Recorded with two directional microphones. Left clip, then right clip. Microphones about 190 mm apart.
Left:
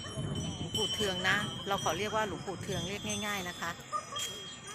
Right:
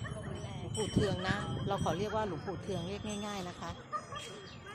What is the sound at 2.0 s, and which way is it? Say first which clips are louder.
Speech: left 2 dB; 5° right (ahead or behind).